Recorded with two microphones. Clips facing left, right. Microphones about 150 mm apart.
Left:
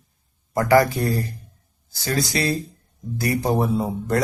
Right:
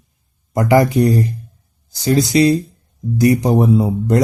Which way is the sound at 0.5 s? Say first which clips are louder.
Right 4 dB; 20° right (ahead or behind).